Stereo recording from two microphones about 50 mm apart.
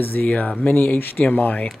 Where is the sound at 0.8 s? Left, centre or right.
Left.